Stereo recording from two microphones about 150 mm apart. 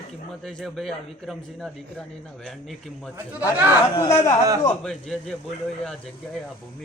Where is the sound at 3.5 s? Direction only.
10° right (ahead or behind).